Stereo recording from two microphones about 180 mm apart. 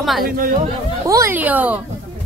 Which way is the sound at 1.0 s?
15° right (ahead or behind).